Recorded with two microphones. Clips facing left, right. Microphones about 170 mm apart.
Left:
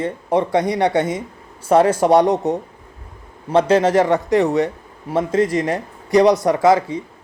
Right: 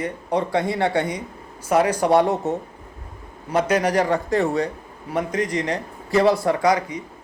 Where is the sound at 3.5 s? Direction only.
30° left (ahead or behind).